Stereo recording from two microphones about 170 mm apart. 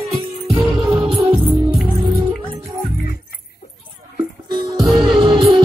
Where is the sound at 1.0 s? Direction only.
Centre (ahead or behind).